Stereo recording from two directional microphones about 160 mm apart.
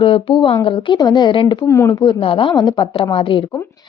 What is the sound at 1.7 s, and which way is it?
Speech, 20° left (ahead or behind).